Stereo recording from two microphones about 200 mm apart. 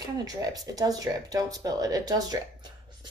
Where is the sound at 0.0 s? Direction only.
20° right (ahead or behind).